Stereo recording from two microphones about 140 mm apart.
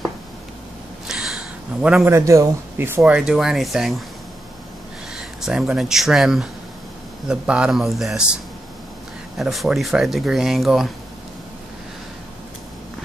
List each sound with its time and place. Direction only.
1.0 s a sound: 5° right (ahead or behind)
2.0 s speech: 20° right (ahead or behind)
3.0 s speech: 5° right (ahead or behind)
5.1 s speech: 5° right (ahead or behind)
9.4 s speech: centre (ahead or behind)